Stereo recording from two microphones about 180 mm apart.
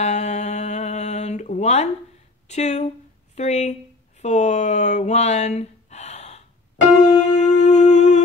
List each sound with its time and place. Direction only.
0.0 s a sound: 40° left (ahead or behind)
2.4 s speech: 40° left (ahead or behind)
7.0 s music: 40° left (ahead or behind)